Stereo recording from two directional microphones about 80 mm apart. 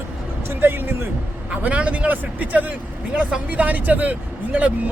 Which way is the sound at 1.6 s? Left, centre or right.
Centre.